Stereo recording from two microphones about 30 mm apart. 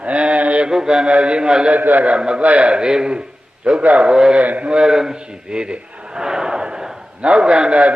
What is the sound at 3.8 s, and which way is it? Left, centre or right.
Speech, right.